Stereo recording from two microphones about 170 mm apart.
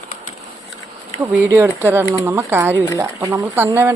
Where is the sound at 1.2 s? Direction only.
5° right (ahead or behind).